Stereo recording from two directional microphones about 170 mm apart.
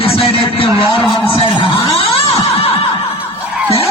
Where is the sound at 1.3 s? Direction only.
30° left (ahead or behind).